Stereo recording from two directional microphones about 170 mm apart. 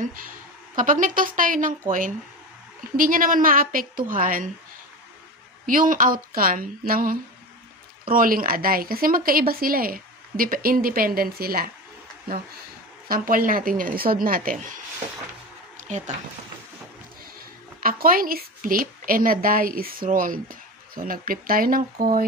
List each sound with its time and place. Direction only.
0.7 s a woman's voice: 50° right (ahead or behind)
5.7 s a woman's voice: 55° right (ahead or behind)
13.1 s a woman's voice: 55° right (ahead or behind)
15.9 s a woman's voice: 45° right (ahead or behind)
17.8 s a woman's voice: 55° right (ahead or behind)